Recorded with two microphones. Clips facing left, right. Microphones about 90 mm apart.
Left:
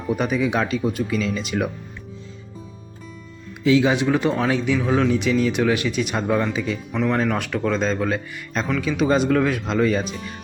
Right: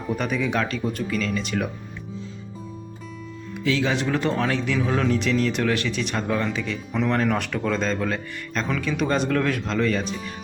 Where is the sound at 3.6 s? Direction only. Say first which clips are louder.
Left 6 dB; 15° left (ahead or behind).